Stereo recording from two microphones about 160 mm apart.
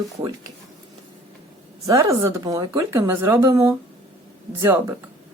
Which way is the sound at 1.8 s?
20° right (ahead or behind).